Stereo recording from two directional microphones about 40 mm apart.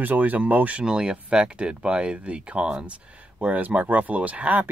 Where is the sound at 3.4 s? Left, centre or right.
Right.